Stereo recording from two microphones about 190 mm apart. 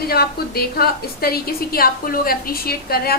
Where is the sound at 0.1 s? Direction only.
55° left (ahead or behind).